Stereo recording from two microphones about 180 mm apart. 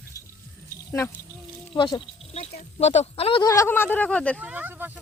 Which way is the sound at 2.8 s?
35° left (ahead or behind).